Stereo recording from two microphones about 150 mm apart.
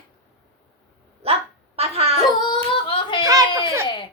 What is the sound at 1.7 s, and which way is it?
Speech, 45° right (ahead or behind).